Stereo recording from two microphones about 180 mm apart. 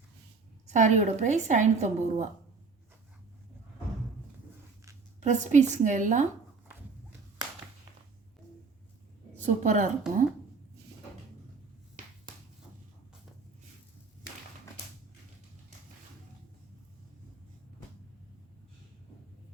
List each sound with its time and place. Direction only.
0.7 s a woman's voice: 40° right (ahead or behind)
5.2 s a woman's voice: 40° right (ahead or behind)
9.4 s a woman's voice: 45° right (ahead or behind)
12.0 s finger snapping: 45° right (ahead or behind)